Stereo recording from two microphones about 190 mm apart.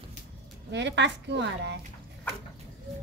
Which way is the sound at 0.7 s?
65° right (ahead or behind).